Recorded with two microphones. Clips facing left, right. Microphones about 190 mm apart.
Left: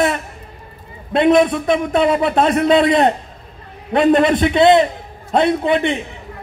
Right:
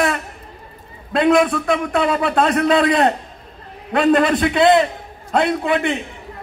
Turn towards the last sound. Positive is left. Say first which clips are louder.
# left 3 dB
turn(degrees=20)  # may be behind; listen again after turning